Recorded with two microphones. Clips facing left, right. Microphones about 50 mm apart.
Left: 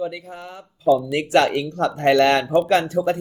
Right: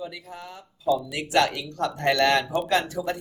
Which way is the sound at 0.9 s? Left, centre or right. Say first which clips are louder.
Left 7 dB; left.